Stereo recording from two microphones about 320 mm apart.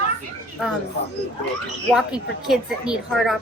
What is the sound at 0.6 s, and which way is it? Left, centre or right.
Speech, centre.